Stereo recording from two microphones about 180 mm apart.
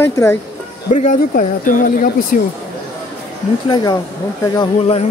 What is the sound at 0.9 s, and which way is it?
Speech, 45° left (ahead or behind).